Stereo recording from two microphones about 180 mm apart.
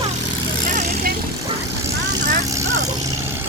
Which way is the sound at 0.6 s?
40° right (ahead or behind).